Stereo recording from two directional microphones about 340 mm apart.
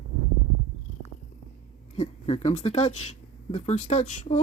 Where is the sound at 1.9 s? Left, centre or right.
Centre.